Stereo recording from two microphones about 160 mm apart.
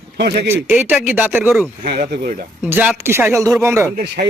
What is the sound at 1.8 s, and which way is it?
Speech, 80° right.